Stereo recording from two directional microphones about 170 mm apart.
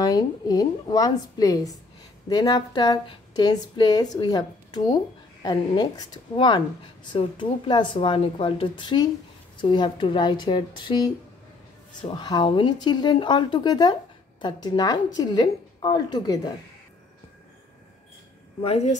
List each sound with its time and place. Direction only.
0.0 s a woman's voice: 20° left (ahead or behind)
18.6 s a woman's voice: 40° left (ahead or behind)